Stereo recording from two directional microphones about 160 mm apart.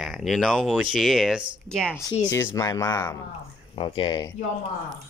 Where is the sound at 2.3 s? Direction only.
20° left (ahead or behind).